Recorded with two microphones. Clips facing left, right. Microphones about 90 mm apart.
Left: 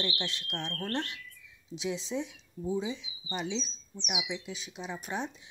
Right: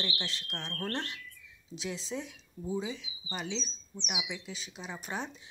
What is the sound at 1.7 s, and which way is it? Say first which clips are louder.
Speech: left 4 dB; 10° left (ahead or behind).